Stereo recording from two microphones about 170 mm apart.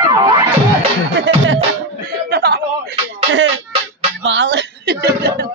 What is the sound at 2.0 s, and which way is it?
Chuckle, 70° right (ahead or behind).